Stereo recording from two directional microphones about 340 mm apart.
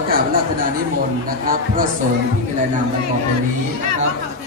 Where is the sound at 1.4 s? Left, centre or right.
Right.